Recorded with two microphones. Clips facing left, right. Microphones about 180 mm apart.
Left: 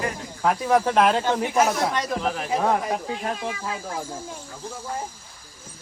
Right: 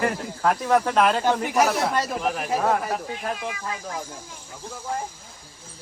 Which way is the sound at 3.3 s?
30° left (ahead or behind).